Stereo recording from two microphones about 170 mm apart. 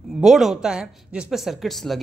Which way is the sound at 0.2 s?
Centre (ahead or behind).